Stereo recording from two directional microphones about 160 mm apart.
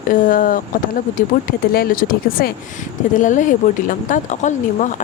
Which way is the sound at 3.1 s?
50° left (ahead or behind).